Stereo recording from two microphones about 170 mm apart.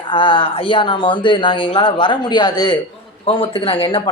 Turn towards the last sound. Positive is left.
turn(degrees=30)  # may be behind; listen again after turning